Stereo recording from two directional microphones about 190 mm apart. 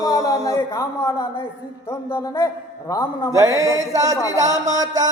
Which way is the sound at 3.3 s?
15° right (ahead or behind).